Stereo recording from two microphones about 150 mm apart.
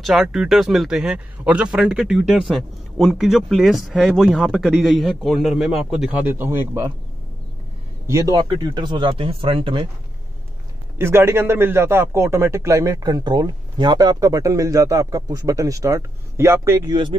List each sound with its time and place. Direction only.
0.0 s a man's voice: 5° right (ahead or behind)
6.2 s speech: 15° right (ahead or behind)
8.1 s speech: 25° right (ahead or behind)
11.0 s a man's voice: 15° right (ahead or behind)